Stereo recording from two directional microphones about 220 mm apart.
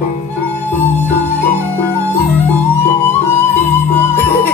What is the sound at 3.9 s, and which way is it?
Music, 10° left (ahead or behind).